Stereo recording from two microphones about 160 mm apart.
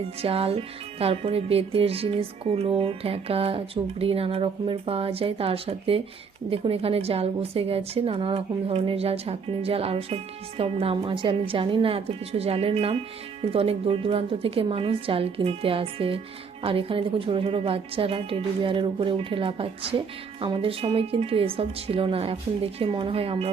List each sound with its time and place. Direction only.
0.2 s speech: 35° right (ahead or behind)